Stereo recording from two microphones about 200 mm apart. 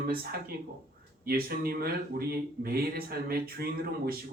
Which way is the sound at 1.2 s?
50° right (ahead or behind).